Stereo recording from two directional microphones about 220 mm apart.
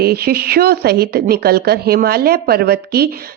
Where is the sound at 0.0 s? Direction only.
45° right (ahead or behind).